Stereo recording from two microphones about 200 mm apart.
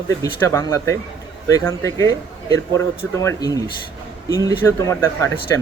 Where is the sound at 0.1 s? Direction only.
15° left (ahead or behind).